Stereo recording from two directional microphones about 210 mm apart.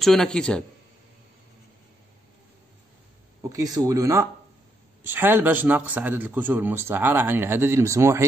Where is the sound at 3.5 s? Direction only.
15° right (ahead or behind).